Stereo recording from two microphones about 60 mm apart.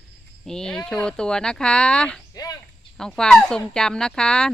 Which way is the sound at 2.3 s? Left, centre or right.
Left.